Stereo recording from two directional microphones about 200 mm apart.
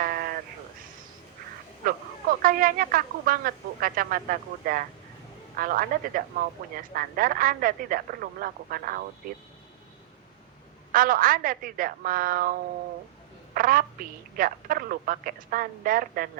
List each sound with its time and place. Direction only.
0.0 s sheep: 45° right (ahead or behind)
2.4 s a woman's voice: 45° right (ahead or behind)
10.9 s a woman's voice: 45° right (ahead or behind)